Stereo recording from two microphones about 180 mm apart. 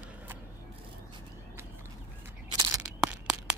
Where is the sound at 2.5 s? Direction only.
20° right (ahead or behind).